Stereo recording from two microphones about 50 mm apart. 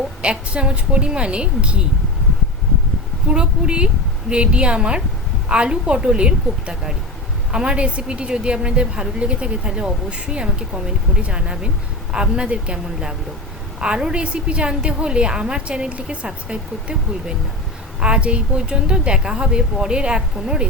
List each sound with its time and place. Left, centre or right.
0.2 s a woman's voice: right
3.3 s a woman's voice: right